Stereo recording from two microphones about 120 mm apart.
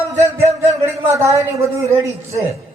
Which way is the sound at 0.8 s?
25° right (ahead or behind).